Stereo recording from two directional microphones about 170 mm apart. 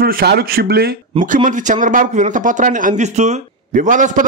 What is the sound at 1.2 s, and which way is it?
A man's voice, 50° right (ahead or behind).